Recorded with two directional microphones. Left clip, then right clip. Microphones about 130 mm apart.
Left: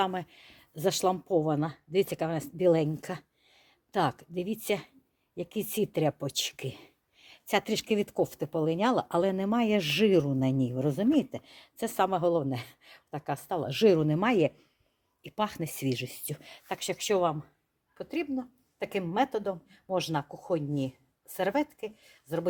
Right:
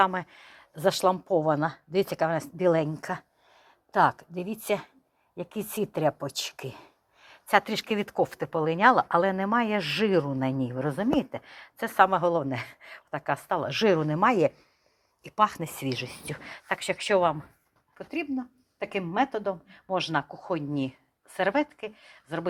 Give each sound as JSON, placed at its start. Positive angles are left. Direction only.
{"t": 0.0, "sound": "a woman's voice", "side_deg": 20}
{"t": 9.0, "sound": "speech", "side_deg": 35}
{"t": 12.2, "sound": "a woman's voice", "side_deg": 15}
{"t": 15.2, "sound": "a woman's voice", "side_deg": 20}
{"t": 17.9, "sound": "a woman's voice", "side_deg": 0}